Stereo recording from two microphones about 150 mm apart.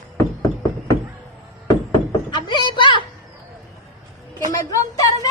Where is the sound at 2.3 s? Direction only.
30° left (ahead or behind).